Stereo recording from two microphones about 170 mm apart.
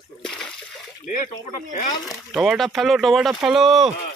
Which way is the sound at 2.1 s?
Centre (ahead or behind).